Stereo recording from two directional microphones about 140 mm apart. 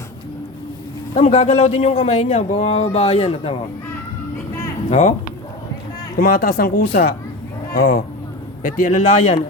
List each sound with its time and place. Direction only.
1.1 s a man's voice: 50° left (ahead or behind)
4.9 s a man's voice: 50° left (ahead or behind)
6.1 s speech: 90° left
8.6 s speech: 75° left (ahead or behind); by 9.4 s 55° left (ahead or behind)